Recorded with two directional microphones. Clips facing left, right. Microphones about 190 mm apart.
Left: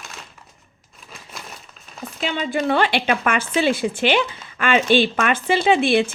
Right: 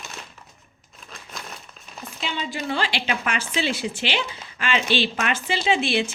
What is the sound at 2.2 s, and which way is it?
Speech, 55° left (ahead or behind).